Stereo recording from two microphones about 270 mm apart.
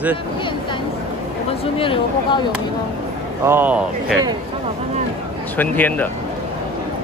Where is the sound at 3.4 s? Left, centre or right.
Centre.